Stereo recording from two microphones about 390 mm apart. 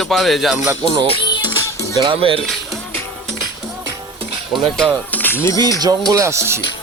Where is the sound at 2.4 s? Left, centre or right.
Centre.